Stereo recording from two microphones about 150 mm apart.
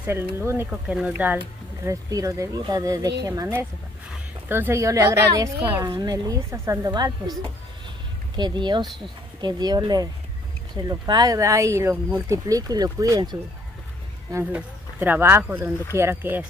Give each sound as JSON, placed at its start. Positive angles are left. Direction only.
{"t": 0.0, "sound": "speech", "side_deg": -15}
{"t": 0.7, "sound": "speech", "side_deg": -5}
{"t": 1.9, "sound": "speech", "side_deg": -20}
{"t": 8.4, "sound": "speech", "side_deg": -30}
{"t": 14.3, "sound": "speech", "side_deg": -10}